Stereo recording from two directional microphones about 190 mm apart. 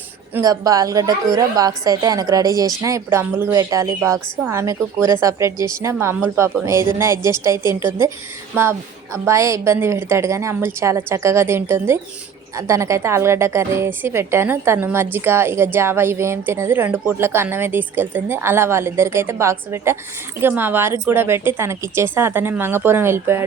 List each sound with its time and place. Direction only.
0.3 s a woman's voice: 20° right (ahead or behind)
9.1 s a woman's voice: 15° right (ahead or behind)